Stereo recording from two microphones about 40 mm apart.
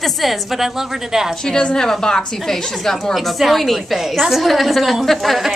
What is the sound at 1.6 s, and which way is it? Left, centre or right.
A woman's voice, centre.